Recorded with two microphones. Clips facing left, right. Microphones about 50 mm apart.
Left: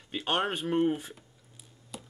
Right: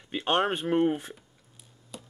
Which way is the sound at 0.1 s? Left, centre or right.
Centre.